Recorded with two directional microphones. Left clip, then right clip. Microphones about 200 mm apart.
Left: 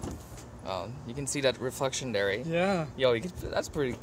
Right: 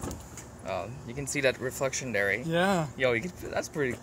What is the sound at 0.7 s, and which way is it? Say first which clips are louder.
Speech: right 1 dB; 15° left (ahead or behind).